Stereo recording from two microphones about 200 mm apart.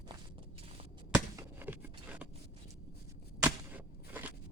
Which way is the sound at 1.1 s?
15° right (ahead or behind).